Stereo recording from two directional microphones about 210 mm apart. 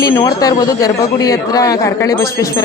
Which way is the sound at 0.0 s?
15° left (ahead or behind).